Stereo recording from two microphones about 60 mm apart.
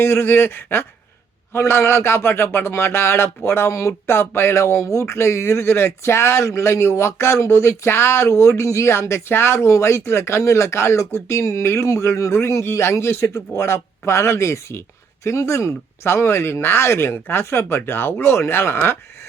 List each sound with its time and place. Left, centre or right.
0.0 s a man's voice: left